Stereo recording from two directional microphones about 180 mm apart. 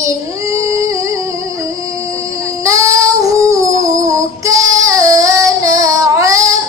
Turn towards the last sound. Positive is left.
turn(degrees=-20)  # may be behind; listen again after turning